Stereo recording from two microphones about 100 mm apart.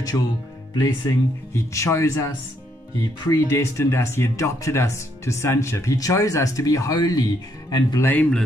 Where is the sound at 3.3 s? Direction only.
30° left (ahead or behind).